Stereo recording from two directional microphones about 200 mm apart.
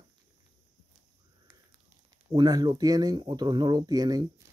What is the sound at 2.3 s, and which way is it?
Speech, 20° right (ahead or behind).